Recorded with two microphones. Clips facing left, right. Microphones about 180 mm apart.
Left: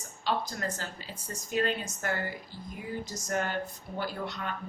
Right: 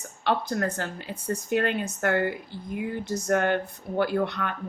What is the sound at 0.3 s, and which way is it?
Speech, 60° right (ahead or behind).